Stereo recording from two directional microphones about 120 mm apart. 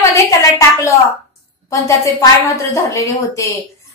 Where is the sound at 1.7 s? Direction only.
25° left (ahead or behind).